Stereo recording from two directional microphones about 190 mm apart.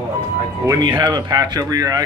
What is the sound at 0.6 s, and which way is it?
Speech, 15° right (ahead or behind).